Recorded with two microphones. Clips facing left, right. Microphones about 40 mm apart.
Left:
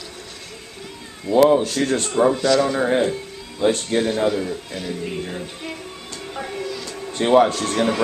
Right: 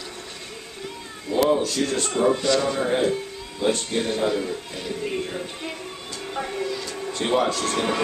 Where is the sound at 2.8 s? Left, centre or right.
Centre.